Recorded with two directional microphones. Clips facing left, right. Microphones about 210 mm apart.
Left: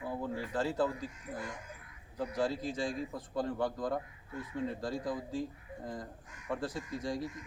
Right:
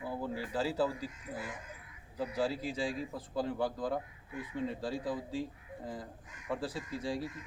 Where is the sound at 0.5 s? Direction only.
5° right (ahead or behind).